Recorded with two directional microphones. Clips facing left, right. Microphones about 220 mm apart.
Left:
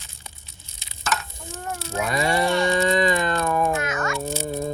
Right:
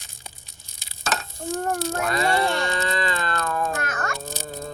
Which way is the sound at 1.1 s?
45° right (ahead or behind).